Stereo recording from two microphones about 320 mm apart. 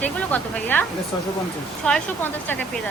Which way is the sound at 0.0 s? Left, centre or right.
Centre.